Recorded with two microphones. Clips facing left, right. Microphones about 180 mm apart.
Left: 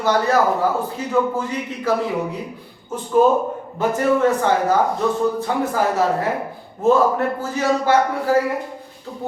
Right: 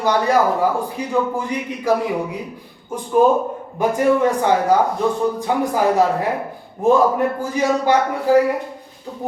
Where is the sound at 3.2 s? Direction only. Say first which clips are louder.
Right 1 dB; 15° right (ahead or behind).